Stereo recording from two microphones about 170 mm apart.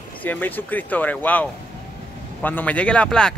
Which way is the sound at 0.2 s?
10° left (ahead or behind).